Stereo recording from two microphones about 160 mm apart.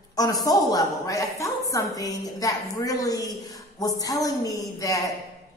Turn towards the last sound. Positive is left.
turn(degrees=20)  # may be behind; listen again after turning